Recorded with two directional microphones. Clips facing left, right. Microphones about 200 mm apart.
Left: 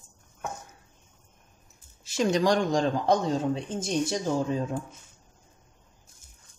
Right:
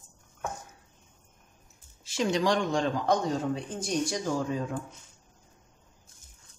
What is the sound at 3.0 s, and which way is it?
Speech, 25° left (ahead or behind).